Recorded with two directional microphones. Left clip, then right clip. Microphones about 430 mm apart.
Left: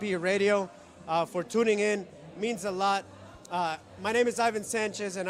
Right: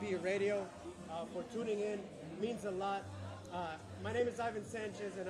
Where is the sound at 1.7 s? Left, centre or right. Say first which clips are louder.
Left 10 dB; left.